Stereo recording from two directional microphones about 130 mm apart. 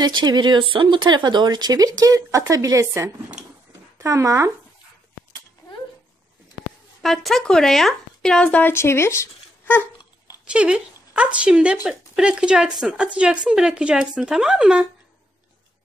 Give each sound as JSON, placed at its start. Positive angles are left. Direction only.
{"t": 0.0, "sound": "speech", "side_deg": -35}
{"t": 7.0, "sound": "speech", "side_deg": 0}
{"t": 10.5, "sound": "speech", "side_deg": -10}